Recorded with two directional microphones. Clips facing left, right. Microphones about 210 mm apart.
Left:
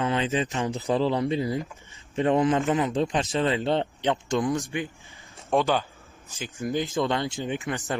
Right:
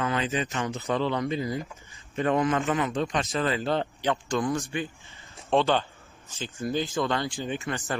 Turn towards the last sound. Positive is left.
turn(degrees=15)  # may be behind; listen again after turning